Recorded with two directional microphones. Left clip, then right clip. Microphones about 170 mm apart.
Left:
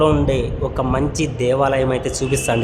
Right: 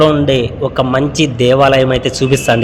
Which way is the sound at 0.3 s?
15° right (ahead or behind).